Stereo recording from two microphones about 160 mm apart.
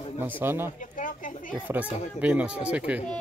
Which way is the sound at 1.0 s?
55° left (ahead or behind).